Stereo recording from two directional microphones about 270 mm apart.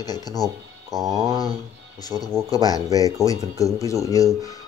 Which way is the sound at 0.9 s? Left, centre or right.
Centre.